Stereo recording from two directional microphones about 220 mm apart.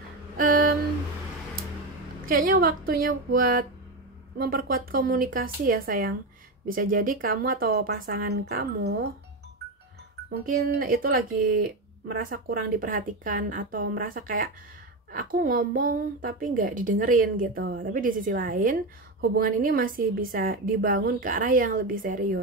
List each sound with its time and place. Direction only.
0.4 s a sound: 40° right (ahead or behind)
2.2 s speech: 40° right (ahead or behind)
10.4 s speech: 40° right (ahead or behind)